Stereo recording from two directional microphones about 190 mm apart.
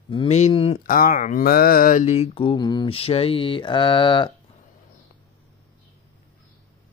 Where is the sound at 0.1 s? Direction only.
30° left (ahead or behind).